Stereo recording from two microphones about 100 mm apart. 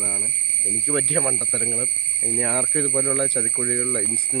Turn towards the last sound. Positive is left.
turn(degrees=-5)  # may be behind; listen again after turning